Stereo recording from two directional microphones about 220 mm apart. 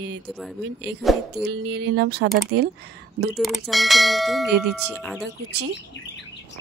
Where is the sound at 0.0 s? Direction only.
50° right (ahead or behind).